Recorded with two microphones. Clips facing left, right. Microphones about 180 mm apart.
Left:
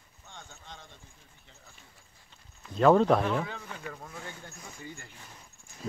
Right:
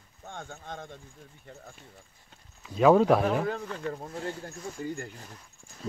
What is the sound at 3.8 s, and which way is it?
Speech, 35° right (ahead or behind).